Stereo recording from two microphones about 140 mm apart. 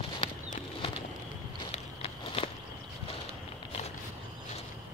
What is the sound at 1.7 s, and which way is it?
Walk, 45° left (ahead or behind).